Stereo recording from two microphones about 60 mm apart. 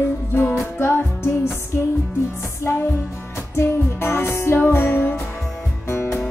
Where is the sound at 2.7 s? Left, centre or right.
Left.